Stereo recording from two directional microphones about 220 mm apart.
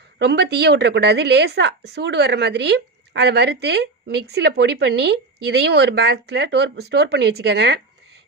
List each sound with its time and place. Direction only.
0.2 s a woman's voice: 50° right (ahead or behind)